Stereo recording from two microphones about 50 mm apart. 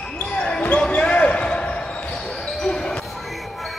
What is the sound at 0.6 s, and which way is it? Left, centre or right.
Basketball bounce, left.